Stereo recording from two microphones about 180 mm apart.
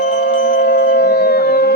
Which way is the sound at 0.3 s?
55° left (ahead or behind).